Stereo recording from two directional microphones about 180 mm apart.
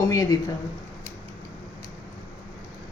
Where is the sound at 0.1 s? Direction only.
20° left (ahead or behind).